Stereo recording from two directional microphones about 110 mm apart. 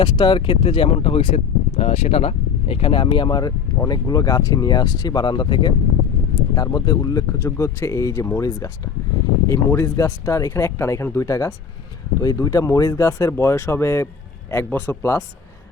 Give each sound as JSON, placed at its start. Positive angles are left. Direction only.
{"t": 0.0, "sound": "speech", "side_deg": 50}